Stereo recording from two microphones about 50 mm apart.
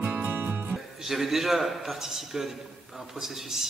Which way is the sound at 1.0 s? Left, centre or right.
Centre.